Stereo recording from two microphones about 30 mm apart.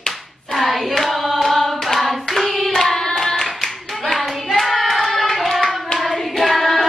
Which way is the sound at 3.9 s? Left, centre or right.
Centre.